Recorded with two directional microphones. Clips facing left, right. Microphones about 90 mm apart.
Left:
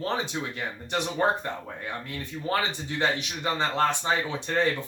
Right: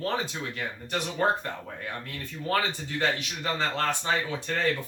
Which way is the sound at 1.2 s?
15° left (ahead or behind).